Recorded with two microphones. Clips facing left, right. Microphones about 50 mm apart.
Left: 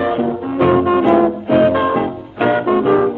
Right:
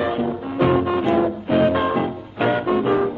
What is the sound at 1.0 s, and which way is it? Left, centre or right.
Music, left.